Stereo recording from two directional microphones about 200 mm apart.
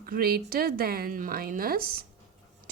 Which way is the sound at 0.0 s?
50° right (ahead or behind).